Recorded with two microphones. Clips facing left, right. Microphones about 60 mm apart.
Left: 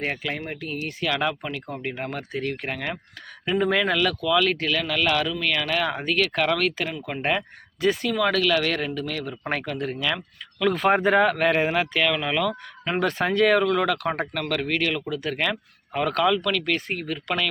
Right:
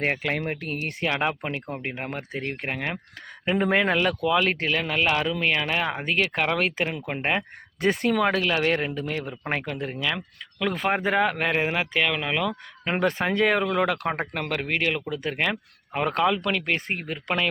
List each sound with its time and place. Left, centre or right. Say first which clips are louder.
0.0 s speech: right 3 dB; right
1.0 s speech: even; right
7.8 s speech: right 1 dB; right
8.2 s speech: left 5 dB; right